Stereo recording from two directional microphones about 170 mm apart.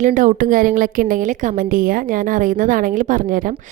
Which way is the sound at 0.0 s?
50° right (ahead or behind).